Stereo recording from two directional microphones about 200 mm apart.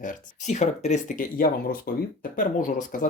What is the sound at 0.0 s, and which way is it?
Speech, 40° left (ahead or behind).